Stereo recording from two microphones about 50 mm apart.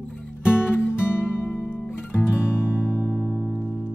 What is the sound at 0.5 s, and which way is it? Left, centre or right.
Music, left.